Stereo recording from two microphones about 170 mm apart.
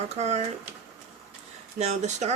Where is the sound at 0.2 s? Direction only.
40° right (ahead or behind).